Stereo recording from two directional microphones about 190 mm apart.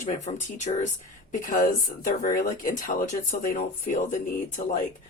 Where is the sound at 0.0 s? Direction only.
40° left (ahead or behind).